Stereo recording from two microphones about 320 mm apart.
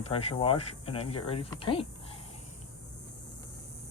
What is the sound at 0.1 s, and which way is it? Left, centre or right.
Speech, centre.